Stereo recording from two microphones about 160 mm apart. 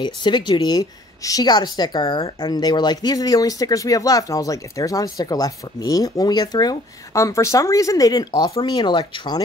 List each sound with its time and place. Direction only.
0.0 s speech: 30° left (ahead or behind)